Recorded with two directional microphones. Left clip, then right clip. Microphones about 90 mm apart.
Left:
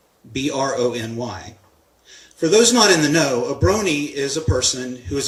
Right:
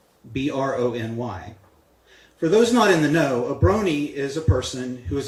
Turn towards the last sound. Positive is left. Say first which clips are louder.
# left 3 dB
turn(degrees=40)  # may be behind; listen again after turning